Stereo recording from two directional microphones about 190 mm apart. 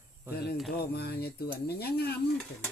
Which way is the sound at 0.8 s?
55° left (ahead or behind).